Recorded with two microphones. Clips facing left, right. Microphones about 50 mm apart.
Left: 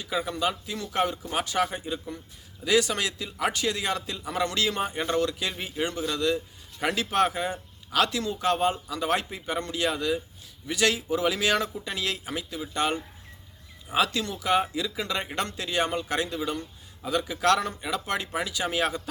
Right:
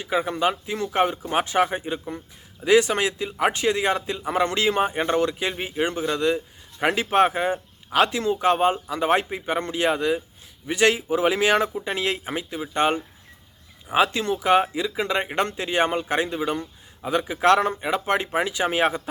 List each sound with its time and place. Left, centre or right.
0.0 s a man's voice: right